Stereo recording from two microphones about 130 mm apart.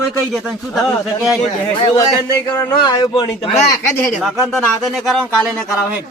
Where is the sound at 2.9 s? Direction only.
30° left (ahead or behind).